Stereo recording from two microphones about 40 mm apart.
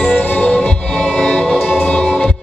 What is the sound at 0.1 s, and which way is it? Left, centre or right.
Music, left.